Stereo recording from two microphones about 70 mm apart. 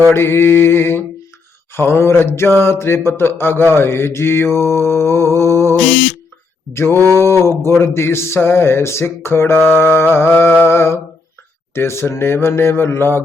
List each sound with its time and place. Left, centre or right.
0.1 s mantra: left
6.7 s mantra: left
10.6 s a sound: left
11.7 s mantra: left